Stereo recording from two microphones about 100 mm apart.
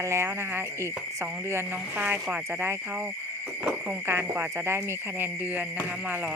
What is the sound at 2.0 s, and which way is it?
Speech, 15° right (ahead or behind).